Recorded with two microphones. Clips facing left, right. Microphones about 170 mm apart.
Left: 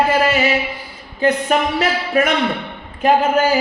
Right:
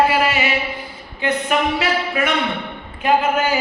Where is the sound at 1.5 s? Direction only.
40° left (ahead or behind).